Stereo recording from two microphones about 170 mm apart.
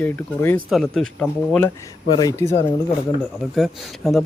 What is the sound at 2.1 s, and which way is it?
Speech, 25° left (ahead or behind).